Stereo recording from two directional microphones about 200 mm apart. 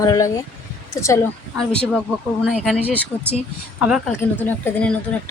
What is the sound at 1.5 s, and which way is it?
Speech, 5° left (ahead or behind).